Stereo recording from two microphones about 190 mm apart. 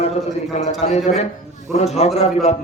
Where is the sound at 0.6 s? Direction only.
35° left (ahead or behind).